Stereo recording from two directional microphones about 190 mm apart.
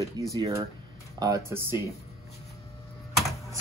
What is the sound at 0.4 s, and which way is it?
Speech, 15° right (ahead or behind).